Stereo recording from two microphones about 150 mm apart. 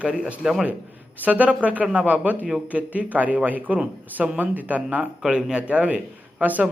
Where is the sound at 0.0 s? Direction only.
5° right (ahead or behind).